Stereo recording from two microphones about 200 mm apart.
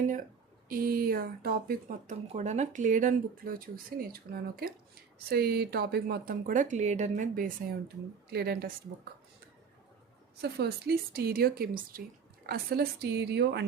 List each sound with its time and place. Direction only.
0.7 s speech: 45° right (ahead or behind)
8.3 s speech: 50° right (ahead or behind)
10.4 s a woman's voice: 50° right (ahead or behind)